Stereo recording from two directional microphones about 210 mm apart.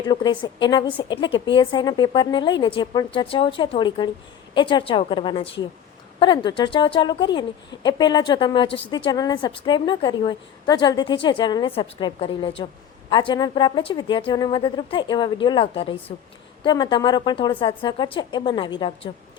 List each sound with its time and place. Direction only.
0.1 s a woman's voice: 20° left (ahead or behind)